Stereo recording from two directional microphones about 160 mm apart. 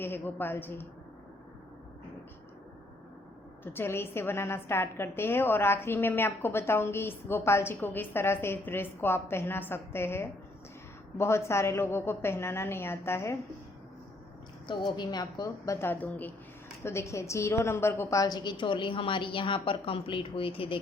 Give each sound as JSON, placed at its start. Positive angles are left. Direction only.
{"t": 0.0, "sound": "a woman's voice", "side_deg": 15}
{"t": 3.6, "sound": "a woman's voice", "side_deg": 15}
{"t": 14.7, "sound": "a woman's voice", "side_deg": 30}